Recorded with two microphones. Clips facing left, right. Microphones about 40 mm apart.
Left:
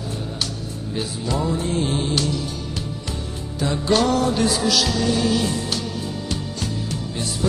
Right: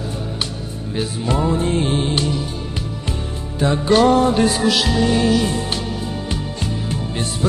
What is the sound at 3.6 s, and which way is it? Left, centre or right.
Music, right.